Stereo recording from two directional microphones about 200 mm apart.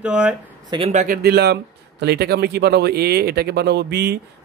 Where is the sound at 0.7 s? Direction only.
30° right (ahead or behind).